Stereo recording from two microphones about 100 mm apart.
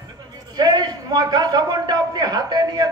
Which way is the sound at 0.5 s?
45° right (ahead or behind).